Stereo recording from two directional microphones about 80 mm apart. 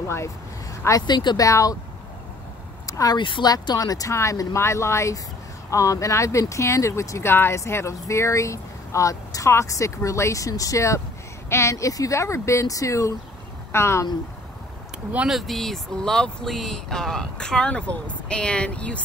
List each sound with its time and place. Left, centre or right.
0.0 s speech: left
1.0 s speech: left
2.9 s a sound: left
3.2 s speech: left
3.4 s speech: left
15.2 s speech: centre